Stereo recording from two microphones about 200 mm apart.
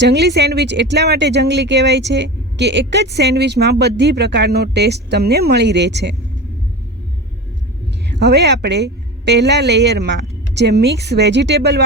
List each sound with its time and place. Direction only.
0.0 s speech: 55° right (ahead or behind)
8.1 s speech: 55° right (ahead or behind)